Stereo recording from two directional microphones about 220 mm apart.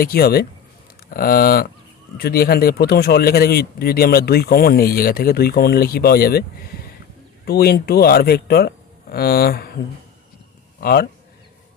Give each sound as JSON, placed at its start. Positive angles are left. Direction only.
{"t": 0.0, "sound": "a man's voice", "side_deg": 45}
{"t": 10.8, "sound": "a man's voice", "side_deg": 45}